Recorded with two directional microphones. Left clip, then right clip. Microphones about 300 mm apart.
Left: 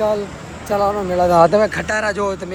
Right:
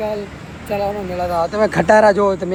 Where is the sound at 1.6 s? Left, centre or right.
Centre.